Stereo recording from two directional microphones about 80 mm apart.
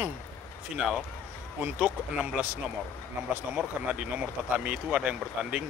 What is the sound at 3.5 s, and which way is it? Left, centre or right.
Speech, centre.